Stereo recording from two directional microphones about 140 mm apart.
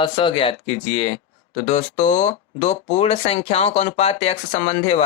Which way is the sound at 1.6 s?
55° left (ahead or behind).